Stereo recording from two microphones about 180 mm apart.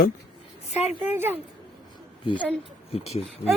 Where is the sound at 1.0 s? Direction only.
10° right (ahead or behind).